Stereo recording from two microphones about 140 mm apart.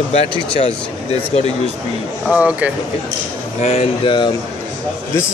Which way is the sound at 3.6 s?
45° left (ahead or behind).